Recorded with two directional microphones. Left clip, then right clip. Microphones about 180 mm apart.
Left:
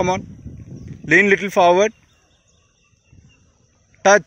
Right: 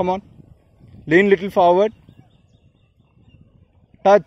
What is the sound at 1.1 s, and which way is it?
Speech, 15° right (ahead or behind).